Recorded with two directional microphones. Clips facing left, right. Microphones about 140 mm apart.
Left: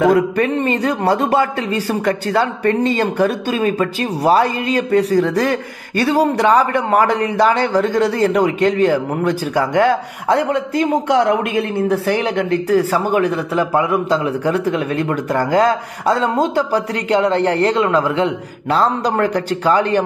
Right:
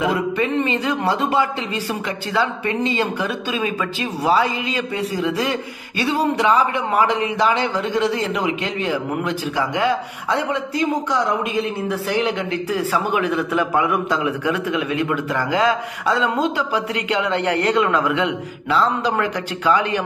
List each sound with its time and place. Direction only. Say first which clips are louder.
0.0 s a sound: left 6 dB; 55° left (ahead or behind)
0.6 s speech: left 3 dB; 45° left (ahead or behind)
18.7 s a man's voice: left 3 dB; 45° left (ahead or behind)